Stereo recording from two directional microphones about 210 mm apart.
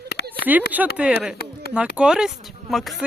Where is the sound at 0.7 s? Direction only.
5° right (ahead or behind).